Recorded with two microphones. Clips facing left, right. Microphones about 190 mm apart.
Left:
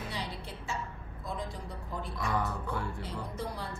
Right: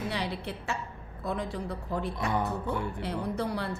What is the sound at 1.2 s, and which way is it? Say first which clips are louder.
Speech: right 7 dB; 65° right (ahead or behind).